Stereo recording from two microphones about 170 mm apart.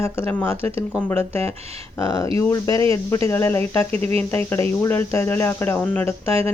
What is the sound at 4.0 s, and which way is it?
Speech, 35° right (ahead or behind).